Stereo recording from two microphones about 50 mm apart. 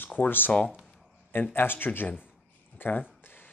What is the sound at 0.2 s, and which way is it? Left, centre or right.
Speech, left.